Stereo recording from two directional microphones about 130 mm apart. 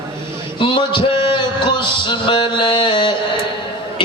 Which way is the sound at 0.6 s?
40° left (ahead or behind).